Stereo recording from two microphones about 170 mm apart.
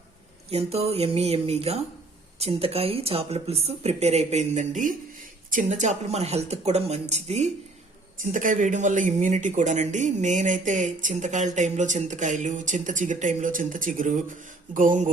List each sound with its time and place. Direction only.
0.5 s speech: 35° right (ahead or behind)